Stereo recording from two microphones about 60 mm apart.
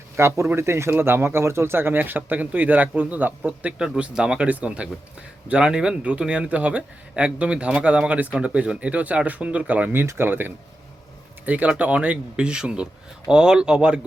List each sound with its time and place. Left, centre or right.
0.2 s speech: right
10.1 s speech: right
11.4 s speech: right